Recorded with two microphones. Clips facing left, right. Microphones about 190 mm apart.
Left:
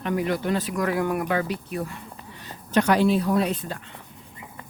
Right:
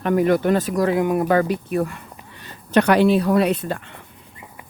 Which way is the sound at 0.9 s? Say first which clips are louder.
Right 4 dB; 20° right (ahead or behind).